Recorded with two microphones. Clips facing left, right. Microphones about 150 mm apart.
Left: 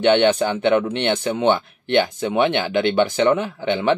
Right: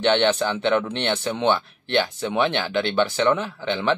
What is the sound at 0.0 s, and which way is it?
Speech, 15° left (ahead or behind).